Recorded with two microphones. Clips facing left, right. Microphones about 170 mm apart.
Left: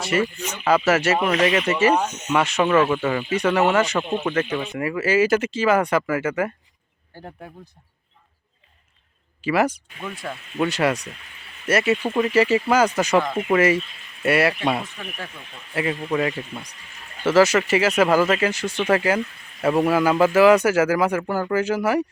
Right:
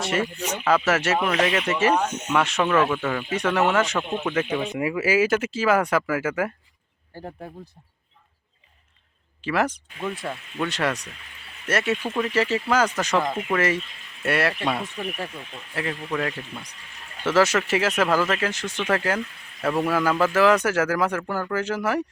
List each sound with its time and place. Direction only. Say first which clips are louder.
0.0 s speech: left 2 dB; 5° left (ahead or behind)
4.4 s speech: even; 10° right (ahead or behind)
9.4 s speech: left 4 dB; 5° left (ahead or behind)
10.6 s speech: left 5 dB; 10° left (ahead or behind)
17.2 s speech: left 4 dB; centre (ahead or behind)